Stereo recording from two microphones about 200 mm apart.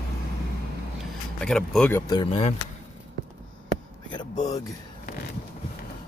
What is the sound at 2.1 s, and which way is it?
Speech, 25° left (ahead or behind).